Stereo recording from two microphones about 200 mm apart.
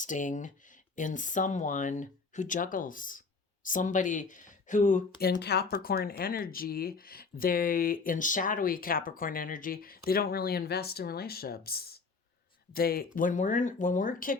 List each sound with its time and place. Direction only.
0.0 s speech: 40° left (ahead or behind)